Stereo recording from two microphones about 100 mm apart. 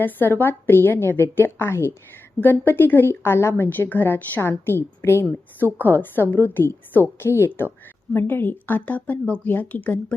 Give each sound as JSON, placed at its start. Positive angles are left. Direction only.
{"t": 0.0, "sound": "a woman's voice", "side_deg": 20}